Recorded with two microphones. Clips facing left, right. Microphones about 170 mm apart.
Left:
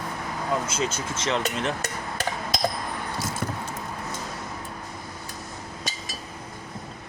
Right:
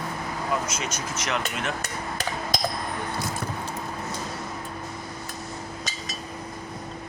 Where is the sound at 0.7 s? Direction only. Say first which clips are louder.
Left 3 dB; 30° left (ahead or behind).